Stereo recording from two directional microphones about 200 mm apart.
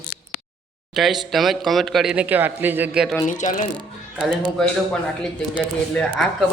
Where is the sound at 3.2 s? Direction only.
40° left (ahead or behind).